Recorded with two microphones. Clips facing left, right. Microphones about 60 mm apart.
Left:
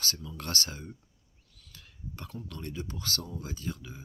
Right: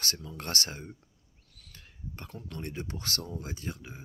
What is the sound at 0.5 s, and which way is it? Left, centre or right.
Speech, right.